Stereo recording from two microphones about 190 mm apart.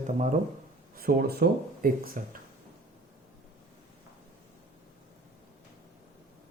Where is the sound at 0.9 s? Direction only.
55° right (ahead or behind).